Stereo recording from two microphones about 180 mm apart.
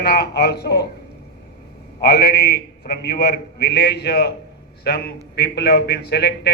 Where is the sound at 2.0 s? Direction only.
65° left (ahead or behind).